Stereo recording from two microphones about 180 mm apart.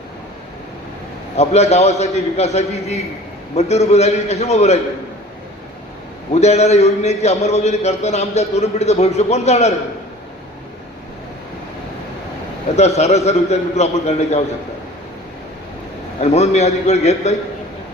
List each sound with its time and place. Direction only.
1.4 s a man's voice: 35° left (ahead or behind)
6.3 s a man's voice: 35° left (ahead or behind)
12.7 s a man's voice: 35° left (ahead or behind)
16.2 s a man's voice: 35° left (ahead or behind)